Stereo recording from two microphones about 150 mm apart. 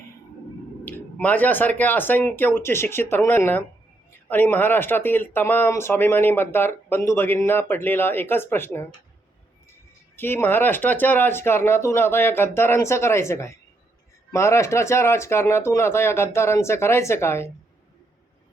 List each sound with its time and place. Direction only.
0.9 s speech: 10° left (ahead or behind)
10.2 s speech: 15° left (ahead or behind)